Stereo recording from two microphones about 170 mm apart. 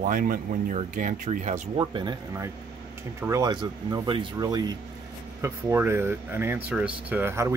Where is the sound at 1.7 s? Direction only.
25° right (ahead or behind).